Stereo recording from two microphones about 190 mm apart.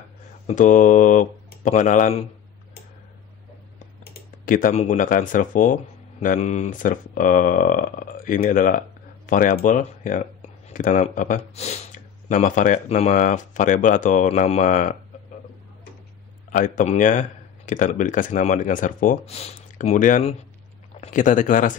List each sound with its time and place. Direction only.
0.5 s speech: 40° left (ahead or behind)
4.0 s speech: 45° left (ahead or behind)
16.4 s speech: 45° left (ahead or behind)